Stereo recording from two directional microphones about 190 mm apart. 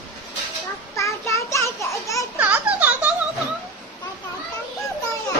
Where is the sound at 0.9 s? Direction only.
15° left (ahead or behind).